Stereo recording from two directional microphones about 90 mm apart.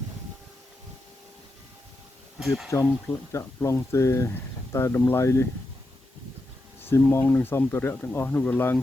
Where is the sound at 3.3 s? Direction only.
35° left (ahead or behind).